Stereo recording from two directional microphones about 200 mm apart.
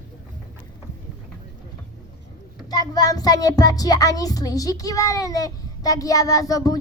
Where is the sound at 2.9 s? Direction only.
20° left (ahead or behind).